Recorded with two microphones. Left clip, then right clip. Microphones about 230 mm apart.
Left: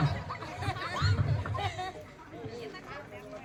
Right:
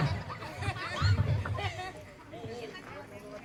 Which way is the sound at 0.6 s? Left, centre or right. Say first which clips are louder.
Left 1 dB; left.